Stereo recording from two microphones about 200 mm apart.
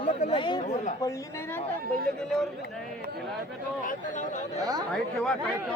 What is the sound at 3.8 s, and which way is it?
Speech, 40° left (ahead or behind).